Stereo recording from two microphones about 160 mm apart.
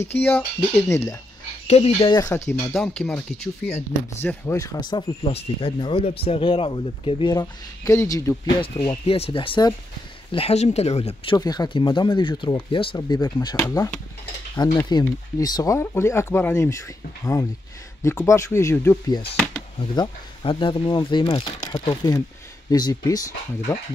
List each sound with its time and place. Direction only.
0.2 s speech: 10° left (ahead or behind)
1.7 s speech: 35° left (ahead or behind); by 2.7 s 15° left (ahead or behind)
2.7 s speech: centre (ahead or behind)
4.2 s speech: 15° left (ahead or behind)
9.0 s speech: 35° left (ahead or behind)
11.3 s speech: 25° left (ahead or behind)
13.6 s speech: 15° left (ahead or behind)
14.5 s stir: 25° left (ahead or behind)
14.9 s speech: 25° left (ahead or behind)
20.0 s speech: 30° left (ahead or behind)